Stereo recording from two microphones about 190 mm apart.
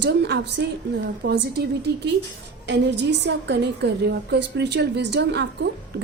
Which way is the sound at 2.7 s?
65° right (ahead or behind).